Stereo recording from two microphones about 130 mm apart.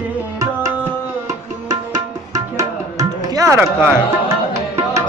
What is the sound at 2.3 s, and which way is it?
Music, 25° right (ahead or behind).